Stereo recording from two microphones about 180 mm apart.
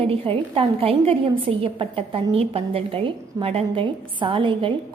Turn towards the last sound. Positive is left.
turn(degrees=-25)  # may be behind; listen again after turning